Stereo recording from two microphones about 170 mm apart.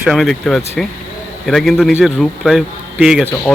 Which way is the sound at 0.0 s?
Centre (ahead or behind).